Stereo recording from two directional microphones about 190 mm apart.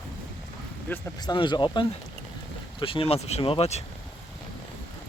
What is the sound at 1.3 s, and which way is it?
Speech, 25° left (ahead or behind).